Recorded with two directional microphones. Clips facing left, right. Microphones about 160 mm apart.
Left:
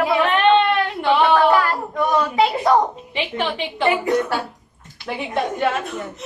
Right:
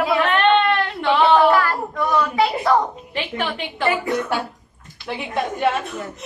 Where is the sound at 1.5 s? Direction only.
20° left (ahead or behind).